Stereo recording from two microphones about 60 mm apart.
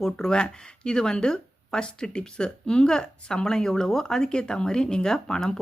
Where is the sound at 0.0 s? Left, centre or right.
Centre.